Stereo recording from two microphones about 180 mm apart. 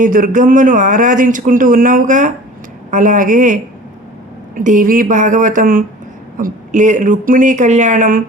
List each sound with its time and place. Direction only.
0.0 s a man's voice: 50° right (ahead or behind)